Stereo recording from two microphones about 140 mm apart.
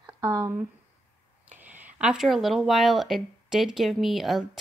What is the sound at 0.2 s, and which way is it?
Speech, 30° right (ahead or behind).